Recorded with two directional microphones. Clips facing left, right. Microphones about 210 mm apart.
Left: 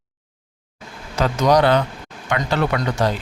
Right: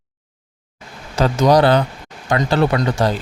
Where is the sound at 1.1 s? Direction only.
30° right (ahead or behind).